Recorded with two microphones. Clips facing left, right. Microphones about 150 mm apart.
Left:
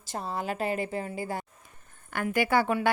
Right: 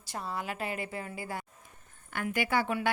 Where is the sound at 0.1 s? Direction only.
30° left (ahead or behind).